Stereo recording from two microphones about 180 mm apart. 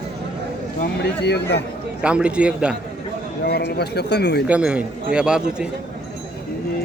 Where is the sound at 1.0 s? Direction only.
65° left (ahead or behind).